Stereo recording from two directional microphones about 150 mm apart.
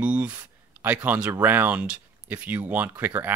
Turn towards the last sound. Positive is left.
turn(degrees=-10)  # may be behind; listen again after turning